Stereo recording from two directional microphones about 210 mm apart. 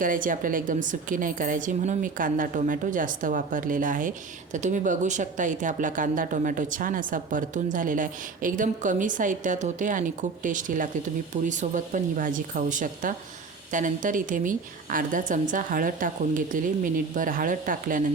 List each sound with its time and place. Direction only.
0.0 s speech: 40° right (ahead or behind)